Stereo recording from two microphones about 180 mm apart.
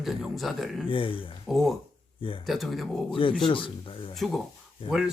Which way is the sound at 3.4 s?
30° left (ahead or behind).